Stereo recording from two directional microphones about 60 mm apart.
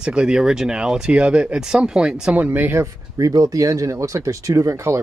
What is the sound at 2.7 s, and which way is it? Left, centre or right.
Speech, right.